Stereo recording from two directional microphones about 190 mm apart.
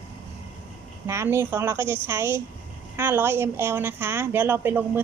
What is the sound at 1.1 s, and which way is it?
Speech, 15° right (ahead or behind).